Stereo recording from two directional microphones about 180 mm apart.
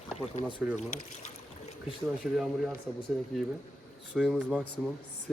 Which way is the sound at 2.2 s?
5° right (ahead or behind).